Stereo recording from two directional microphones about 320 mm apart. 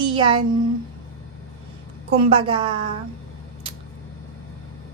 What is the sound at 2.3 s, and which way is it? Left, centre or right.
Speech, centre.